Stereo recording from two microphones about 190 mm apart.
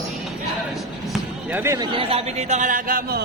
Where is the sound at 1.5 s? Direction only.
15° right (ahead or behind).